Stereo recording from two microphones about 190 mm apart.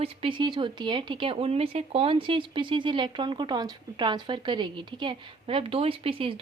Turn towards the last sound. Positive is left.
turn(degrees=-30)  # may be behind; listen again after turning